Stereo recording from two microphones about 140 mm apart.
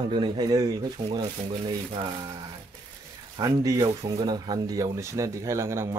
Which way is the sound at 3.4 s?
25° right (ahead or behind).